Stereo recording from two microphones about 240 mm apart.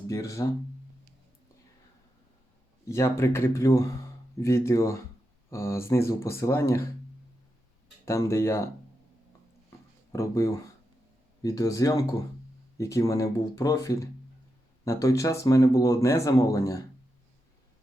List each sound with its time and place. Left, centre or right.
0.1 s speech: centre
2.9 s speech: centre
8.0 s speech: centre
9.6 s a sound: centre
11.4 s speech: centre